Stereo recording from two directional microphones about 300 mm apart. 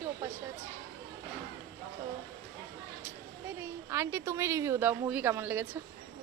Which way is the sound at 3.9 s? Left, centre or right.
Centre.